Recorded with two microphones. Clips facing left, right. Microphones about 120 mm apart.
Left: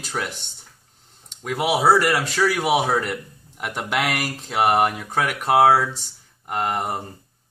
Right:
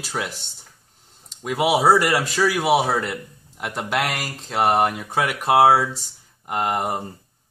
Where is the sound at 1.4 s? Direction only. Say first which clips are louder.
Right 1 dB; 10° right (ahead or behind).